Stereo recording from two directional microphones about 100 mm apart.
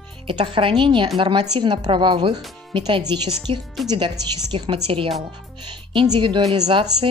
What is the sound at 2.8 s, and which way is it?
Speech, 45° right (ahead or behind).